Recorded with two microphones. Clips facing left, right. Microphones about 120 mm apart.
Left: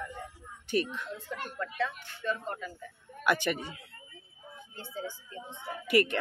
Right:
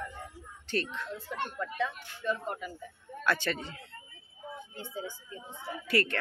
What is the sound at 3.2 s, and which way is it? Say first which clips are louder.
Speech: left 2 dB; 15° left (ahead or behind).